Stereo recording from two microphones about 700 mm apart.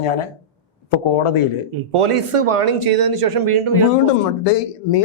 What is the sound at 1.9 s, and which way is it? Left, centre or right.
Speech, right.